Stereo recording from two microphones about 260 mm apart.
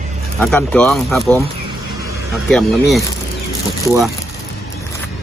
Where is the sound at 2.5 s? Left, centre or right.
Centre.